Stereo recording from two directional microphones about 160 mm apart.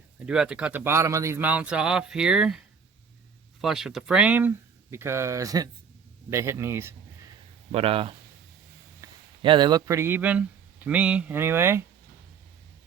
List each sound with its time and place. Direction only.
0.3 s speech: 5° right (ahead or behind)
7.7 s speech: 35° right (ahead or behind)
9.0 s a sound: 20° right (ahead or behind)
9.4 s speech: 30° right (ahead or behind)